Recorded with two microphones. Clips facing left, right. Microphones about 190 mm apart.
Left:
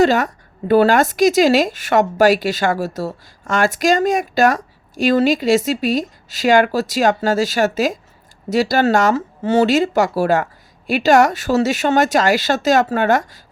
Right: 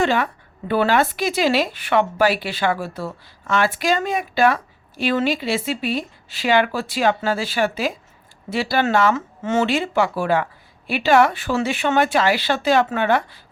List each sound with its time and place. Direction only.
0.0 s speech: 40° left (ahead or behind)